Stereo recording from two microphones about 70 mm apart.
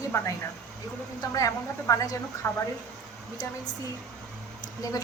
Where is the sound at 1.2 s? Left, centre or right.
Left.